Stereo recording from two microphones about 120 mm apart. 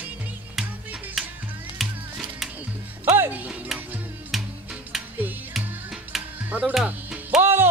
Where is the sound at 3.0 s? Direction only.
20° right (ahead or behind).